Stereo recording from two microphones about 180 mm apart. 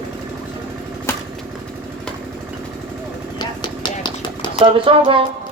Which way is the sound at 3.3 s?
25° left (ahead or behind).